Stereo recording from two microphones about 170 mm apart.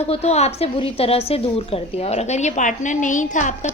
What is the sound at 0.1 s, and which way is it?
A woman's voice, 40° left (ahead or behind).